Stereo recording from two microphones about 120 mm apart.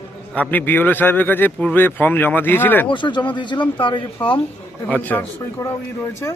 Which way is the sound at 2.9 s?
40° left (ahead or behind).